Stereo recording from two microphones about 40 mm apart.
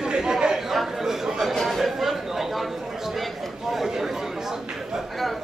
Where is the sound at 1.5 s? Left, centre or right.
Centre.